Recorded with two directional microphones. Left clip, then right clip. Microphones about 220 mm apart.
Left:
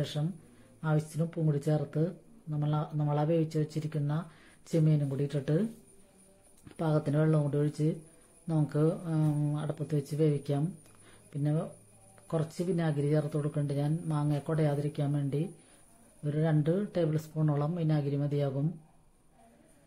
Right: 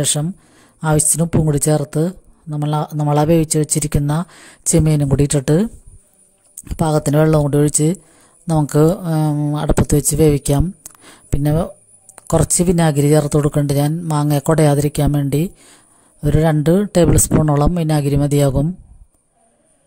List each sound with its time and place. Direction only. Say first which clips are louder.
0.0 s speech: right 16 dB; 50° right (ahead or behind)